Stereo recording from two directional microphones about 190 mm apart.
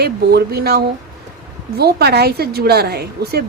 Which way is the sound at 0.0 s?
60° right (ahead or behind).